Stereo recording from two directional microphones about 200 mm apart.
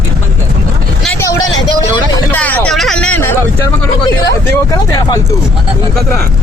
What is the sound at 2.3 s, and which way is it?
Hubbub, 10° left (ahead or behind).